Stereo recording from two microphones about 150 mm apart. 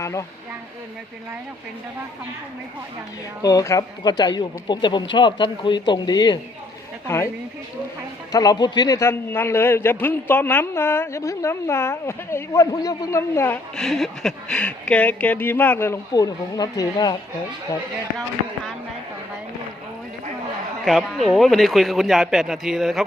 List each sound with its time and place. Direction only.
0.0 s speech: 20° left (ahead or behind)
3.4 s speech: 20° left (ahead or behind)
7.1 s a man's voice: 15° left (ahead or behind)
8.3 s a man's voice: 25° left (ahead or behind)
13.7 s a man's voice: centre (ahead or behind)
16.1 s speech: 25° left (ahead or behind)
20.8 s speech: centre (ahead or behind)